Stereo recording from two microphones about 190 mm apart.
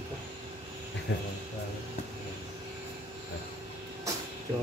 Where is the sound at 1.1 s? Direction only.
70° left (ahead or behind).